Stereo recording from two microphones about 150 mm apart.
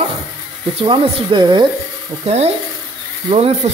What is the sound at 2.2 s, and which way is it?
Speech, 45° right (ahead or behind).